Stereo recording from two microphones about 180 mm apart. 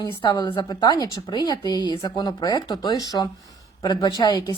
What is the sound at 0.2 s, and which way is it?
A woman's voice, 25° left (ahead or behind).